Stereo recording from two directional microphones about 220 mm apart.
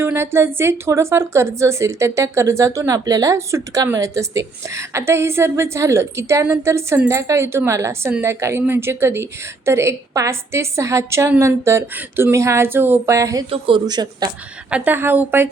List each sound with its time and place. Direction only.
0.0 s a woman's voice: 10° right (ahead or behind)